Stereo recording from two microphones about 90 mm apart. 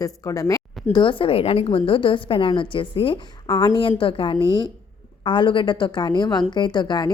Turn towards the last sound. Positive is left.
turn(degrees=55)  # may be behind; listen again after turning